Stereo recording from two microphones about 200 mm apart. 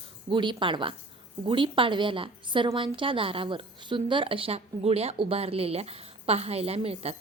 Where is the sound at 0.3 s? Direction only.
25° right (ahead or behind).